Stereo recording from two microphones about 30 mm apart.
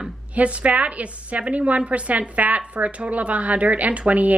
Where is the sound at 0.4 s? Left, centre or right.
Right.